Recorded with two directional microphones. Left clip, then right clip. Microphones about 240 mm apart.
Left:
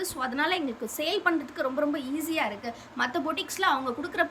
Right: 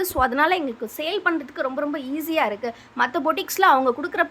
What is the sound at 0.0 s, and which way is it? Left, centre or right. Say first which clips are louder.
A woman's voice: right 9 dB; centre.